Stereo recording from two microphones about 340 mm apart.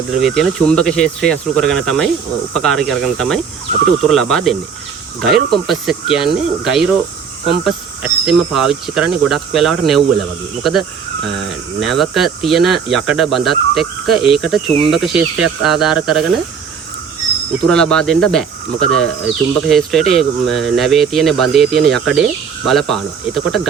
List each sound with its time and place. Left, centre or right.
0.1 s speech: centre
17.7 s speech: centre